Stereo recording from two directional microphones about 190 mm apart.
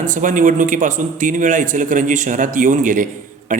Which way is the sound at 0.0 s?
45° right (ahead or behind).